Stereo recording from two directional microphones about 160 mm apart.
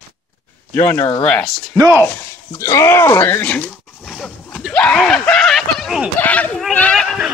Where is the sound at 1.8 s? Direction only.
15° right (ahead or behind).